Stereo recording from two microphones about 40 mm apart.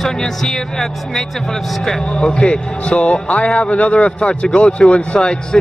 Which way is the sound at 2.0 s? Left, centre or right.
Left.